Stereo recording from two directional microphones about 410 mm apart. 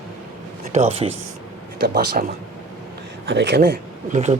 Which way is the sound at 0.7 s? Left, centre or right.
Centre.